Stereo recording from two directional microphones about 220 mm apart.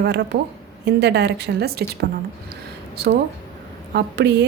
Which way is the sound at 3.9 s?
50° right (ahead or behind).